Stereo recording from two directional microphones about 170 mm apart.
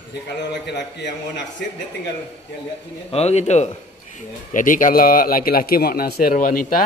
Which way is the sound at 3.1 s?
40° left (ahead or behind).